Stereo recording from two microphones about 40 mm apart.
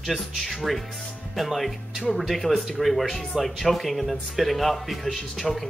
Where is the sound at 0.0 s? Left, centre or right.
Centre.